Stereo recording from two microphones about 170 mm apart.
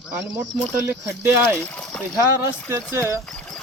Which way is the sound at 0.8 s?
15° right (ahead or behind).